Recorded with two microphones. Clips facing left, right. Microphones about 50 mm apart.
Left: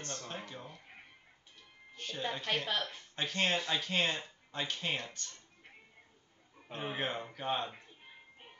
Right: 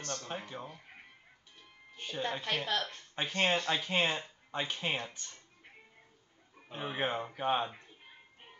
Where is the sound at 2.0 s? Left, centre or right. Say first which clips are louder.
Right 3 dB; centre.